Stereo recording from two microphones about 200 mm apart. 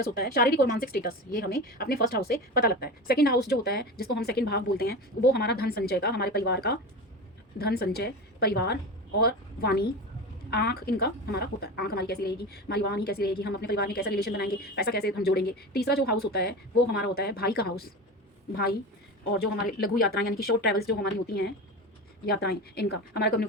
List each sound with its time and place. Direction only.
0.0 s a woman's voice: 50° left (ahead or behind)